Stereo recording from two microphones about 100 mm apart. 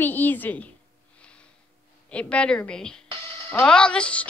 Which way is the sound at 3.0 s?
55° right (ahead or behind).